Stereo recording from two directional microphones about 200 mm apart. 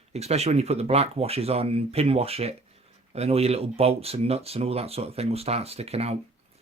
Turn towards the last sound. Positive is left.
turn(degrees=-30)  # may be behind; listen again after turning